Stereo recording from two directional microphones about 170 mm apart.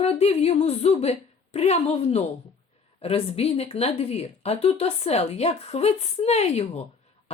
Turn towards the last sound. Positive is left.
turn(degrees=40)  # may be behind; listen again after turning